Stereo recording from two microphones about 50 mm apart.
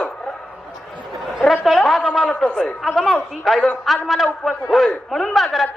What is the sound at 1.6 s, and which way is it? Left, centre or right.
Speech, centre.